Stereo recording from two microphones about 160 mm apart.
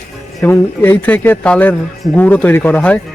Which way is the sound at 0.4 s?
15° left (ahead or behind).